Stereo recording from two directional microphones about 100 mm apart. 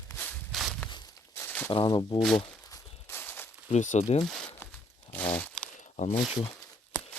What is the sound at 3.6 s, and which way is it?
Speech, 90° left.